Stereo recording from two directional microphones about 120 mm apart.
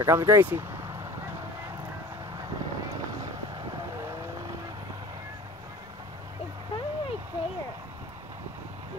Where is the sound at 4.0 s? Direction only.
25° right (ahead or behind).